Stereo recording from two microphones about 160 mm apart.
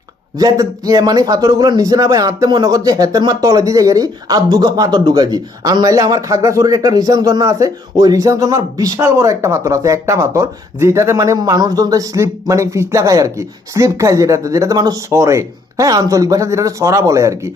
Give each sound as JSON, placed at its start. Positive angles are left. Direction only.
{"t": 0.3, "sound": "a man's voice", "side_deg": -20}